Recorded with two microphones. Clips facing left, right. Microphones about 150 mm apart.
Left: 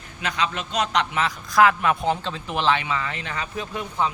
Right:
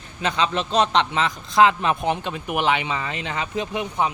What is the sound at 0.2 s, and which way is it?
A man's voice, 30° right (ahead or behind).